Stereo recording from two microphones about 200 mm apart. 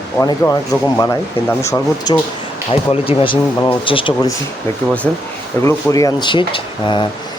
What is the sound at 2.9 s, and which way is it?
Speech, 25° left (ahead or behind).